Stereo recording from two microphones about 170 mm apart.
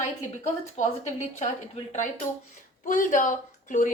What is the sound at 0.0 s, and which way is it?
A woman's voice, 45° left (ahead or behind).